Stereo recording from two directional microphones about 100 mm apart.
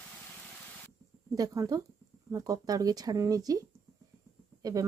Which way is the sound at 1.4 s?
40° right (ahead or behind).